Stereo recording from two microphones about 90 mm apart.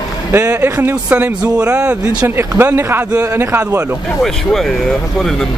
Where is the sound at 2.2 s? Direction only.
25° right (ahead or behind).